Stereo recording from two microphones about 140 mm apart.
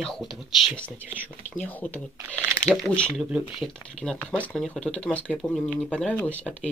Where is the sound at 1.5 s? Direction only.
10° left (ahead or behind).